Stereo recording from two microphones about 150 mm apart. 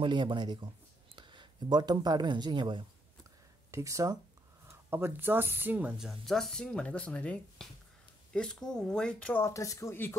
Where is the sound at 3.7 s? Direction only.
20° right (ahead or behind); by 9.4 s 5° left (ahead or behind).